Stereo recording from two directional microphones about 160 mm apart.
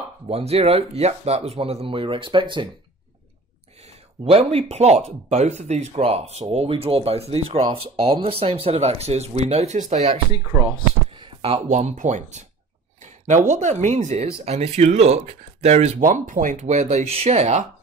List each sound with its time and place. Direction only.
0.3 s speech: 40° right (ahead or behind)
3.8 s speech: 40° right (ahead or behind)
10.5 s speech: 15° right (ahead or behind)
11.1 s a sound: 30° right (ahead or behind)
11.7 s speech: 50° right (ahead or behind)
16.0 s speech: 55° right (ahead or behind)